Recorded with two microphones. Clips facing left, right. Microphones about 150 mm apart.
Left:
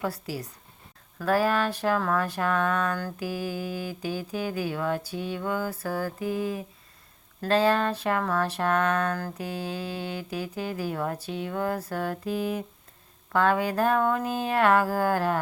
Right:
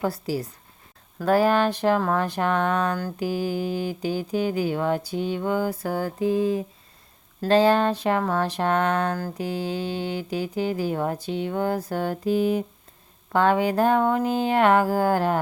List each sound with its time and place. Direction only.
0.0 s speech: 30° right (ahead or behind)
2.0 s mantra: 25° right (ahead or behind)